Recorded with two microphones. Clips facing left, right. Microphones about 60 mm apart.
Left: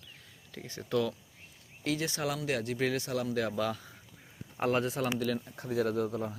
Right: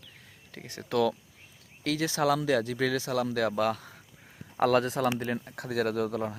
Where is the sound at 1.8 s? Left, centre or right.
Right.